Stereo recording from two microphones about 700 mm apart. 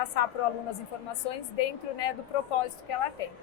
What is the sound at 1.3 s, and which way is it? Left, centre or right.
A woman's voice, left.